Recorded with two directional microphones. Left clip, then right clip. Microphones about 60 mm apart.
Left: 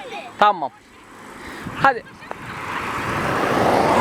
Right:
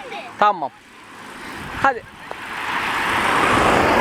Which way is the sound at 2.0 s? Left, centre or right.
Right.